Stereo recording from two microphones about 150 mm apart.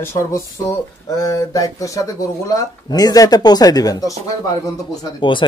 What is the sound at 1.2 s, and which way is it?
Speech, 20° left (ahead or behind).